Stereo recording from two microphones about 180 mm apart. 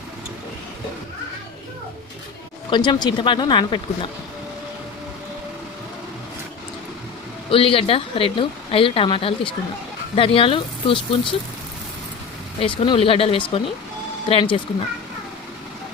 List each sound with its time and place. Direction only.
2.6 s speech: 25° left (ahead or behind)
7.5 s a woman's voice: 30° left (ahead or behind)
12.5 s speech: 30° left (ahead or behind)